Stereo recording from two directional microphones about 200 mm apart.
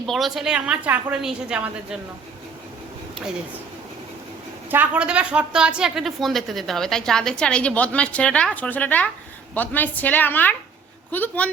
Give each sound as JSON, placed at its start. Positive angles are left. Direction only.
{"t": 0.1, "sound": "a woman's voice", "side_deg": 0}
{"t": 4.7, "sound": "a woman's voice", "side_deg": -5}